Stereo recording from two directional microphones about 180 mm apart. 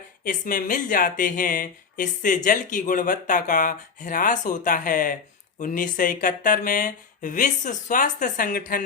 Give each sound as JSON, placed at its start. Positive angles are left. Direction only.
{"t": 0.3, "sound": "speech", "side_deg": 50}